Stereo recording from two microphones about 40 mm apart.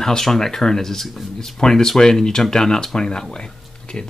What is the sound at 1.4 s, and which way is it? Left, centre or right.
Speech, centre.